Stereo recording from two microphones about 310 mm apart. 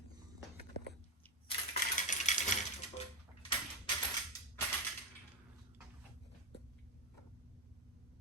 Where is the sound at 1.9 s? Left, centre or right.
Left.